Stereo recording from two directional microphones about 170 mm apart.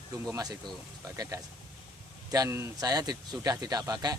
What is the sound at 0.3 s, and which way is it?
A man's voice, 20° right (ahead or behind).